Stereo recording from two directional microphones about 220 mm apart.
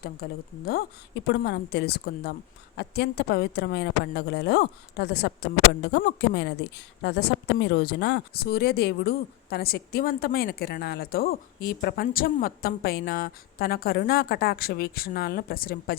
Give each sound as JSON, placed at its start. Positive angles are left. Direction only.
{"t": 0.0, "sound": "a woman's voice", "side_deg": 45}